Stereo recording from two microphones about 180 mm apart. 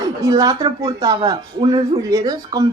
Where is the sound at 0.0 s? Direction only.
20° right (ahead or behind).